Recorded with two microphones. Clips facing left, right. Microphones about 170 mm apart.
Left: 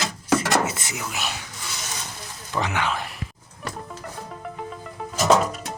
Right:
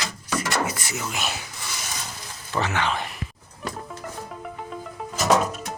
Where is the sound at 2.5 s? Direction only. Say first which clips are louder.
Even; 10° left (ahead or behind).